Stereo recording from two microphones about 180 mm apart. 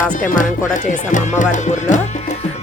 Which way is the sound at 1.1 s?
45° left (ahead or behind).